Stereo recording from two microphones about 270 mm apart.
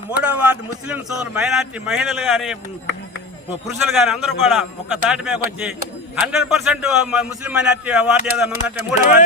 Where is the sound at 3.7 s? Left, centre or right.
Centre.